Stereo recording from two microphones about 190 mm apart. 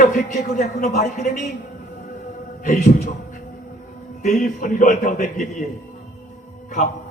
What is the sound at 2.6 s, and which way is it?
Speech, 40° left (ahead or behind).